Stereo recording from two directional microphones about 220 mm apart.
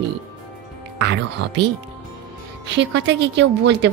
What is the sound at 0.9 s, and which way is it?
Speech, 50° right (ahead or behind).